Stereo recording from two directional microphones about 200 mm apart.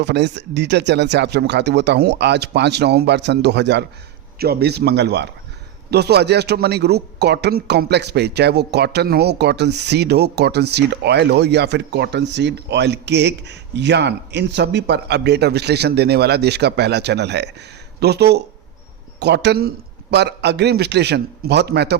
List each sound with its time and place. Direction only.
0.0 s a man's voice: 60° right (ahead or behind)